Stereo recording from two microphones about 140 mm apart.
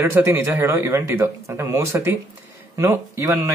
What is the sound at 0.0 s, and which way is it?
Speech, 20° right (ahead or behind).